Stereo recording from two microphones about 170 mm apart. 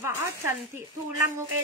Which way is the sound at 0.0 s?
15° right (ahead or behind).